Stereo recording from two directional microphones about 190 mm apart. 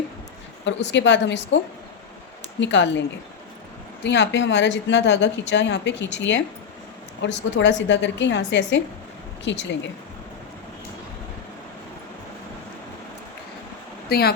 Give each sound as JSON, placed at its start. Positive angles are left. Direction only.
{"t": 0.6, "sound": "speech", "side_deg": 70}
{"t": 2.6, "sound": "speech", "side_deg": 70}
{"t": 4.0, "sound": "speech", "side_deg": 65}
{"t": 14.1, "sound": "speech", "side_deg": 55}